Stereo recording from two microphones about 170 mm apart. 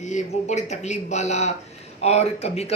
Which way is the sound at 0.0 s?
45° left (ahead or behind).